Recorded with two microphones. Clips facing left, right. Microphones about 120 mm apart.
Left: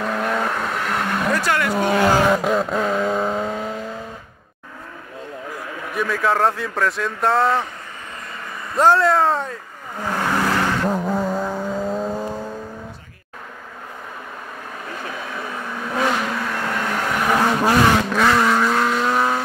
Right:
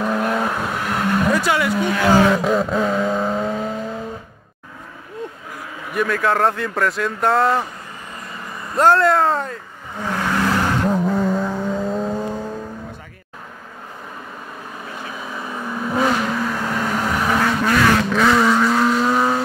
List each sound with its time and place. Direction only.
0.0 s vehicle: 5° right (ahead or behind)
1.8 s speech: 40° left (ahead or behind)
2.0 s vehicle: 5° left (ahead or behind)
5.9 s speech: centre (ahead or behind)
8.7 s speech: centre (ahead or behind)
10.9 s vehicle: centre (ahead or behind)
15.1 s vehicle: 5° right (ahead or behind)